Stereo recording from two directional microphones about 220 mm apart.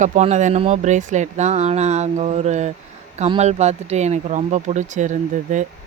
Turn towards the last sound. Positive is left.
turn(degrees=-35)  # may be behind; listen again after turning